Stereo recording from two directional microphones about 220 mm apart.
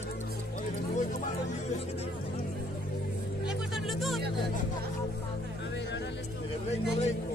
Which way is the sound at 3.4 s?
Centre (ahead or behind).